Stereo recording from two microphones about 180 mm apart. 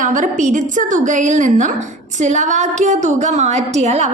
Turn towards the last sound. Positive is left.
turn(degrees=-40)  # may be behind; listen again after turning